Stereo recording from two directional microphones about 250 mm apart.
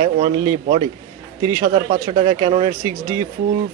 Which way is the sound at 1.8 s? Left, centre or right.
Right.